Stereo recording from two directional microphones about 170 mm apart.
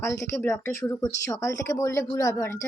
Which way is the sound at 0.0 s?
15° left (ahead or behind).